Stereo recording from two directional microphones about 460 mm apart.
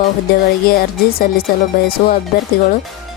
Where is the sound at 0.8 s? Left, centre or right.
Centre.